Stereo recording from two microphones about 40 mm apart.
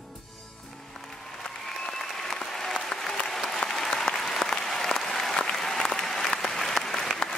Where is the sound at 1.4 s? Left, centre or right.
Centre.